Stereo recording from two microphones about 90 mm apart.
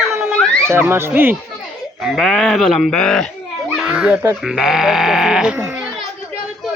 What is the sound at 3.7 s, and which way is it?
Children playing, 10° right (ahead or behind).